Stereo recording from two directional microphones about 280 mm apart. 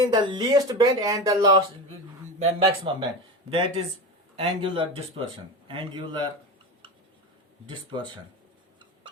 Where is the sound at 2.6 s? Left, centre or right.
Centre.